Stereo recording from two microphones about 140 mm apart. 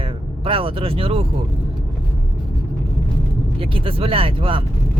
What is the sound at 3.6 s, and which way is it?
Speech, 40° right (ahead or behind).